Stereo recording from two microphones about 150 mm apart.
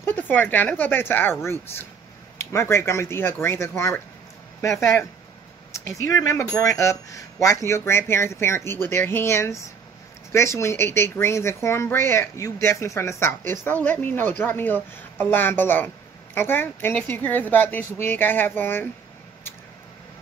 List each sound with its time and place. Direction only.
0.0 s speech: 10° left (ahead or behind)